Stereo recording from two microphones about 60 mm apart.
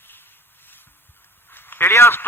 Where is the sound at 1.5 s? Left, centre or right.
Left.